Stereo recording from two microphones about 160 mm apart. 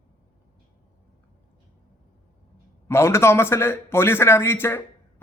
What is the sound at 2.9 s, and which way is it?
A man's voice, 15° left (ahead or behind).